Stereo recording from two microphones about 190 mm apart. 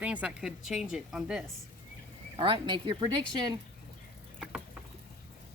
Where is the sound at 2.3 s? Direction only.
25° right (ahead or behind).